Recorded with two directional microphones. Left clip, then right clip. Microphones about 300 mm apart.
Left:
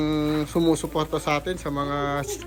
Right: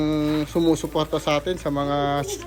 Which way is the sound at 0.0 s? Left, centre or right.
Centre.